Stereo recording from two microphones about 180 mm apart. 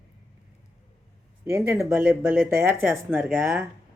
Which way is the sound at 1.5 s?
15° right (ahead or behind).